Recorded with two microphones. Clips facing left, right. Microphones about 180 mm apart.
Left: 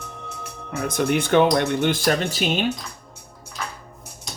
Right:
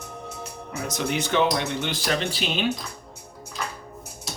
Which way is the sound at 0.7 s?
55° left (ahead or behind).